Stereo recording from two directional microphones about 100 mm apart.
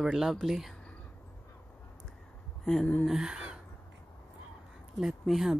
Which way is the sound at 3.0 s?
5° right (ahead or behind).